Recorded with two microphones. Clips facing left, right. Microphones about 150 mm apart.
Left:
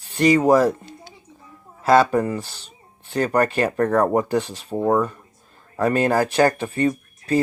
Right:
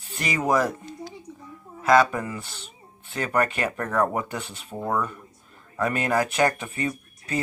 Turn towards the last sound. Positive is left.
turn(degrees=35)  # may be behind; listen again after turning